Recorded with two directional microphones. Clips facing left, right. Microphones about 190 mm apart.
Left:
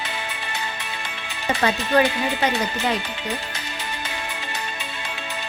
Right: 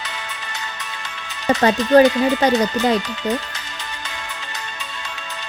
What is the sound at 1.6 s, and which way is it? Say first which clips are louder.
Music: right 7 dB; 35° right (ahead or behind).